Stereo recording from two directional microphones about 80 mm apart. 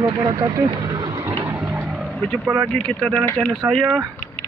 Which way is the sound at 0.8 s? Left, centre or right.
Right.